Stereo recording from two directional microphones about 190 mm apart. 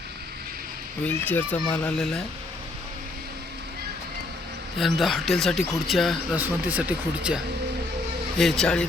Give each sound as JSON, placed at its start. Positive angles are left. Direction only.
{"t": 1.0, "sound": "a child's voice", "side_deg": 10}
{"t": 4.8, "sound": "speech", "side_deg": 0}
{"t": 8.4, "sound": "speech", "side_deg": 0}